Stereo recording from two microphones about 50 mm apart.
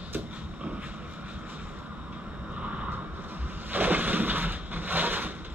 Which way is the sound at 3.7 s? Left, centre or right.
Right.